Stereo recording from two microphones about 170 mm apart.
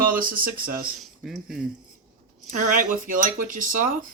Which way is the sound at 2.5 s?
50° right (ahead or behind).